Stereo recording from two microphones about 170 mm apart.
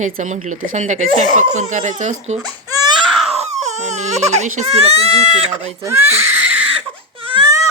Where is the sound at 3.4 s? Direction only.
40° right (ahead or behind).